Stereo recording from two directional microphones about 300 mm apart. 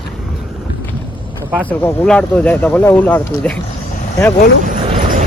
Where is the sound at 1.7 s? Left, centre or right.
Centre.